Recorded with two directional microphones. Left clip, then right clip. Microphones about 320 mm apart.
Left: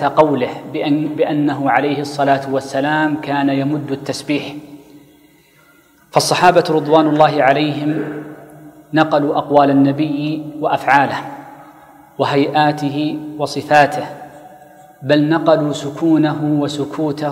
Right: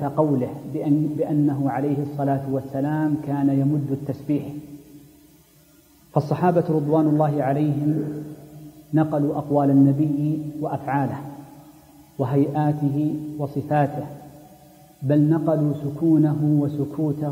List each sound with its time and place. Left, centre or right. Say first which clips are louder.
0.0 s a man's voice: left 9 dB; centre
6.2 s a man's voice: left 10 dB; centre
15.4 s a man's voice: left 9 dB; centre